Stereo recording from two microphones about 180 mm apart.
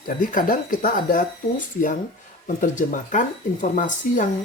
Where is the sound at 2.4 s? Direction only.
45° left (ahead or behind).